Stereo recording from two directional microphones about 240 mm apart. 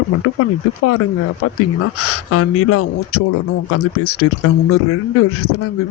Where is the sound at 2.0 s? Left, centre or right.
Left.